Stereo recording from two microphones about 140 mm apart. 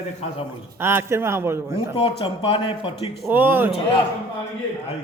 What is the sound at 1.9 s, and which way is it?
A man's voice, 40° left (ahead or behind).